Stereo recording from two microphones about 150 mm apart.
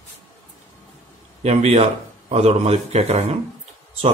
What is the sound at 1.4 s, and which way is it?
Speech, 50° right (ahead or behind).